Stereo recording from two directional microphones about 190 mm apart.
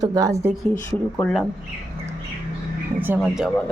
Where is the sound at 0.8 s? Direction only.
5° left (ahead or behind).